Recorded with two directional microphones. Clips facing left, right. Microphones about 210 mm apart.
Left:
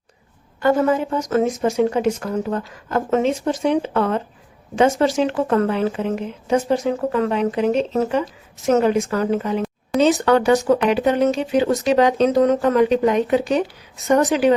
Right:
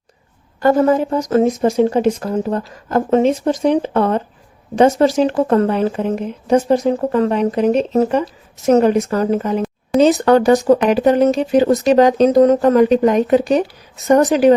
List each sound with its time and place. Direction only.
0.6 s a woman's voice: 40° right (ahead or behind)